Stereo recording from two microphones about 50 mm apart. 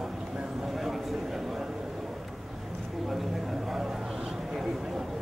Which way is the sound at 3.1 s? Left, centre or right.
Centre.